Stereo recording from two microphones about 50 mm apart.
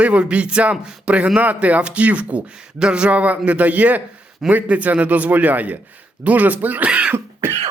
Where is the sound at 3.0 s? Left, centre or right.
Right.